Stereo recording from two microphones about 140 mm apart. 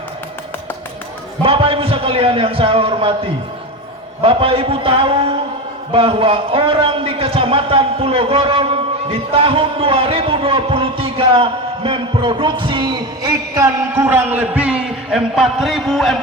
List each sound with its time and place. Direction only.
1.4 s a man's voice: 40° right (ahead or behind); by 16.1 s centre (ahead or behind)